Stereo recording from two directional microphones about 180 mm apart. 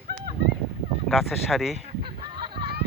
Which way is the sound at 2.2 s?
25° right (ahead or behind).